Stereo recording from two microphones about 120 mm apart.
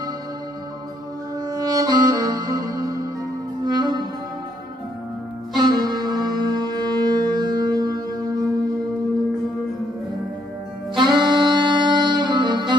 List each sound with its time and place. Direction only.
1.4 s music: 30° right (ahead or behind)
5.6 s music: 35° right (ahead or behind)
11.0 s music: 40° right (ahead or behind)